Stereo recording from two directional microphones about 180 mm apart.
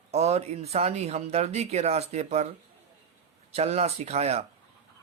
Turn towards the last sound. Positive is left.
turn(degrees=-35)  # may be behind; listen again after turning